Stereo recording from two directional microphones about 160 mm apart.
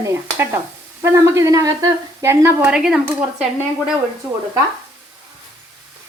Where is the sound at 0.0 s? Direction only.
15° right (ahead or behind).